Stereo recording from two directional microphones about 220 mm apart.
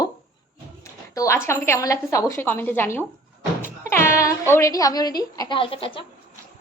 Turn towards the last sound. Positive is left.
turn(degrees=25)  # may be behind; listen again after turning